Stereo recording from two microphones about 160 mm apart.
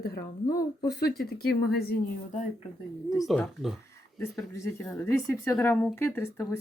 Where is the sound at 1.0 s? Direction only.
85° left.